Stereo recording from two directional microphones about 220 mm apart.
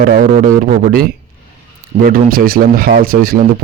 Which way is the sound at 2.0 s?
40° right (ahead or behind).